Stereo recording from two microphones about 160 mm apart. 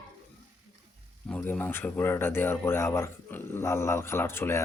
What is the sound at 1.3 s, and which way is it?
Speech, 10° left (ahead or behind).